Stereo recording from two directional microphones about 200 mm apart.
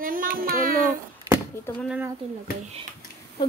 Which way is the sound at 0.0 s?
45° right (ahead or behind).